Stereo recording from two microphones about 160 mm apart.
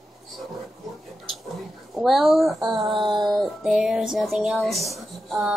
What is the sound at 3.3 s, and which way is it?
Speech, 5° right (ahead or behind).